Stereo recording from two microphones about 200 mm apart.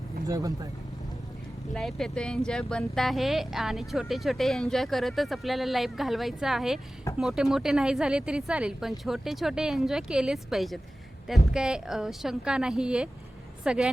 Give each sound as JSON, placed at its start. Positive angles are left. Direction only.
{"t": 0.3, "sound": "speech", "side_deg": -15}
{"t": 1.7, "sound": "speech", "side_deg": 0}